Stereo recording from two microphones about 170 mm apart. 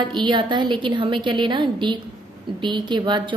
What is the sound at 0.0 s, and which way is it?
A woman's voice, 25° right (ahead or behind).